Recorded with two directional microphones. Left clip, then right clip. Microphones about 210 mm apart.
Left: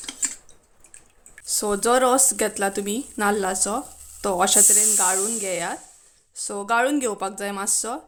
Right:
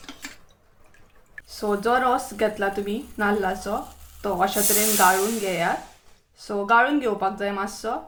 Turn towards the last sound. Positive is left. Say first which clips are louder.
# even
turn(degrees=50)  # may be behind; listen again after turning